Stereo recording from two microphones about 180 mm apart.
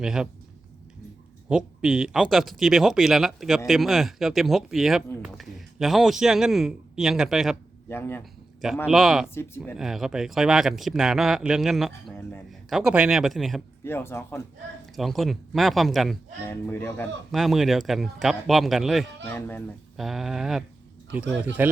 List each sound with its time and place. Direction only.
0.0 s speech: 5° right (ahead or behind)
1.5 s speech: 5° right (ahead or behind)
7.9 s speech: 10° left (ahead or behind)
8.2 s a sound: centre (ahead or behind)
8.9 s speech: centre (ahead or behind)
9.3 s speech: 15° left (ahead or behind)
9.7 s speech: centre (ahead or behind)
13.8 s speech: 15° left (ahead or behind)
14.9 s speech: centre (ahead or behind)
16.5 s speech: 15° left (ahead or behind)
17.3 s speech: centre (ahead or behind)
19.2 s speech: 15° left (ahead or behind)
20.0 s speech: centre (ahead or behind)